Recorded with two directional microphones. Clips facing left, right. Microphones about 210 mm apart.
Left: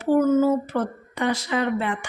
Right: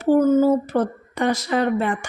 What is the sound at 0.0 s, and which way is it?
A woman's voice, 35° right (ahead or behind).